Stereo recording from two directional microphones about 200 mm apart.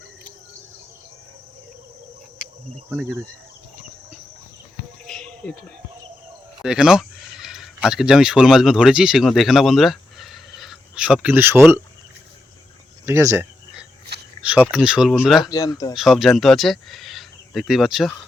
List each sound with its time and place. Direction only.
2.9 s speech: 10° right (ahead or behind)
5.0 s a sound: 5° left (ahead or behind)
6.6 s speech: 5° right (ahead or behind)
13.1 s a sound: 10° right (ahead or behind)
14.7 s speech: 5° right (ahead or behind)
15.4 s speech: 20° left (ahead or behind)
16.0 s speech: centre (ahead or behind)